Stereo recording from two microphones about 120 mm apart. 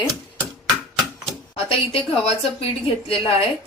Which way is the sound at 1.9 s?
55° left (ahead or behind).